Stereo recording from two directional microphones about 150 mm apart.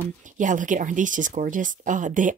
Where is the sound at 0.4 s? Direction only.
60° right (ahead or behind).